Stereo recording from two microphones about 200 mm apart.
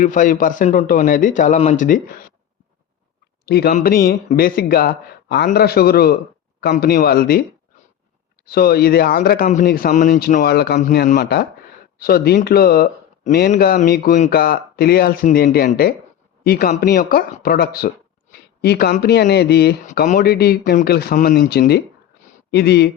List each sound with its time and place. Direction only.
0.0 s a man's voice: 40° left (ahead or behind)
3.4 s speech: 50° left (ahead or behind)
8.4 s speech: 50° left (ahead or behind)
10.8 s speech: 40° left (ahead or behind)
19.9 s speech: 45° left (ahead or behind)